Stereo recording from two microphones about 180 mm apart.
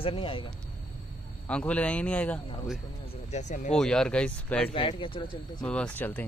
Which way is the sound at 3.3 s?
40° left (ahead or behind).